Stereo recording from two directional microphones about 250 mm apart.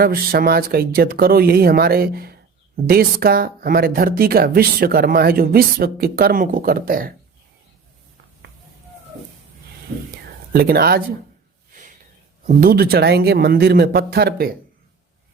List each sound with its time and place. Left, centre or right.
0.0 s speech: right
10.5 s speech: right
12.5 s speech: right